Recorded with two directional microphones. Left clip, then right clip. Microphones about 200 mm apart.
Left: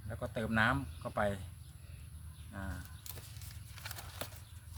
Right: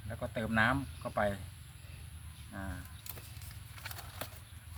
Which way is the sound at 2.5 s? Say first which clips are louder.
Right 2 dB; 25° left (ahead or behind).